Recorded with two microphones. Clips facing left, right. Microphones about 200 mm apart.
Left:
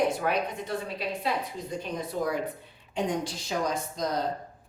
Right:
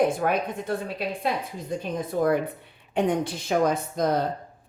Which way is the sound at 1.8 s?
50° right (ahead or behind).